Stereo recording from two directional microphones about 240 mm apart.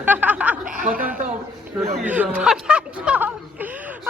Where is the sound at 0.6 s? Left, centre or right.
Right.